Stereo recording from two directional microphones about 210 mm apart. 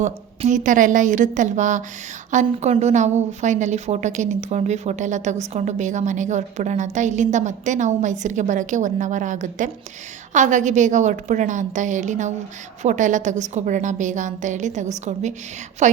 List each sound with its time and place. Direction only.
0.0 s a woman's voice: 35° right (ahead or behind)